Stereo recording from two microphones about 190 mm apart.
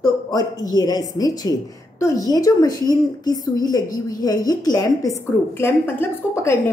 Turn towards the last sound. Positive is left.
turn(degrees=15)  # may be behind; listen again after turning